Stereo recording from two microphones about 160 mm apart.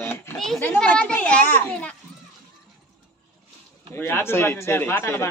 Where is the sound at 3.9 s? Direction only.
15° left (ahead or behind).